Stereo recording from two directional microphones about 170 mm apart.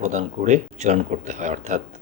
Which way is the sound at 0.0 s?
45° right (ahead or behind).